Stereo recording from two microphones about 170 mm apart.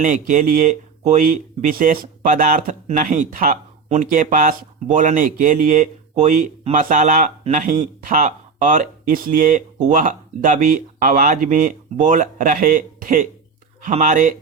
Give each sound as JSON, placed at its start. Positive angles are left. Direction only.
{"t": 0.0, "sound": "speech", "side_deg": -50}